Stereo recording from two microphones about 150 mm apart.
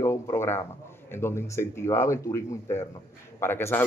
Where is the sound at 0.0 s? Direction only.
20° left (ahead or behind).